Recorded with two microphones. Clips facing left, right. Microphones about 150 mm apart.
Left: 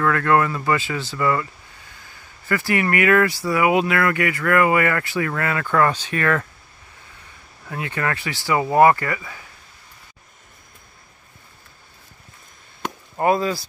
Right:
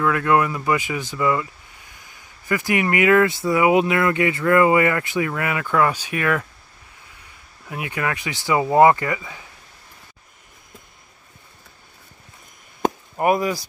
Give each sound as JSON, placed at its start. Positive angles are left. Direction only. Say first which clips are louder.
{"t": 0.0, "sound": "speech", "louder": "even", "side_deg": -15}
{"t": 7.6, "sound": "speech", "louder": "even", "side_deg": -15}
{"t": 13.2, "sound": "speech", "louder": "even", "side_deg": -15}